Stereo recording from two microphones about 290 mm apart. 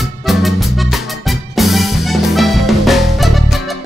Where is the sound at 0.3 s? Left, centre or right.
Centre.